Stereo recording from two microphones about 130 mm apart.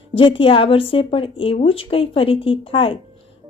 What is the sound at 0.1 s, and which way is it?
A woman's voice, 40° left (ahead or behind).